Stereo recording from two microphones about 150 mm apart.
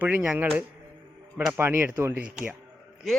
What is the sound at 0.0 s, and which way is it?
Speech, 10° right (ahead or behind).